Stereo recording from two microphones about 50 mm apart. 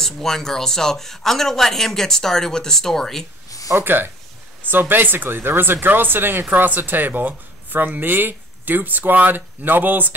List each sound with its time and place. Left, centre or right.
0.0 s speech: centre
3.7 s speech: right